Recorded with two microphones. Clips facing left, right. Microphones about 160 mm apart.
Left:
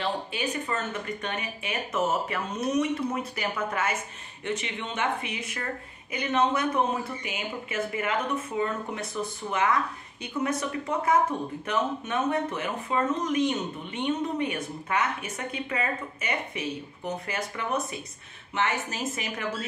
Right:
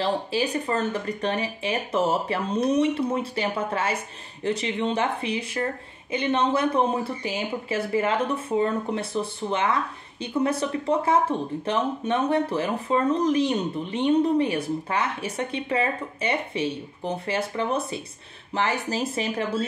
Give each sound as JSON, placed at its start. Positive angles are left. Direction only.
{"t": 0.0, "sound": "speech", "side_deg": -35}